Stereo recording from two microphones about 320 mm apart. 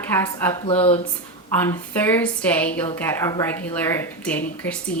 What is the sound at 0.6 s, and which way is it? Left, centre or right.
Speech, centre.